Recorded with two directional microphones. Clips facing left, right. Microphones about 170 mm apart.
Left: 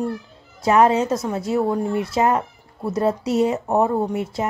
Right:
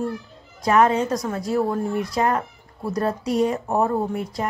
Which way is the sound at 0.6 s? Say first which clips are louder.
Left 2 dB; 25° left (ahead or behind).